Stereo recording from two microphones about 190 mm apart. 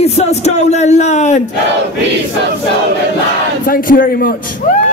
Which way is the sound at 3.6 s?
45° left (ahead or behind).